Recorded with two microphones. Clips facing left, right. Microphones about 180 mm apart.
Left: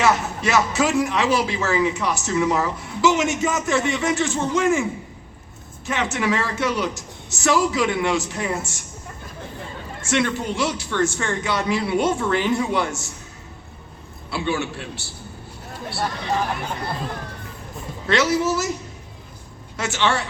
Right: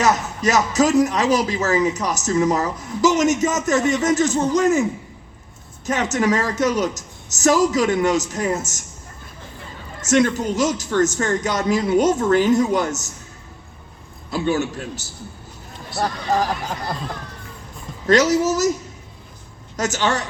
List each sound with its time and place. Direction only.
0.0 s speech: 40° right (ahead or behind)
10.0 s speech: 40° right (ahead or behind)
14.3 s speech: 40° right (ahead or behind)
18.0 s speech: 40° right (ahead or behind)
19.7 s speech: 40° right (ahead or behind)